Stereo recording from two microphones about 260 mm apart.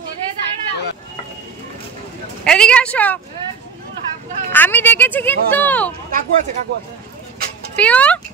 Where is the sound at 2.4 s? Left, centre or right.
Centre.